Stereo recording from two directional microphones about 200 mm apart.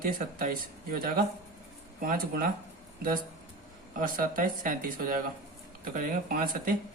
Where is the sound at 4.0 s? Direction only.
45° right (ahead or behind).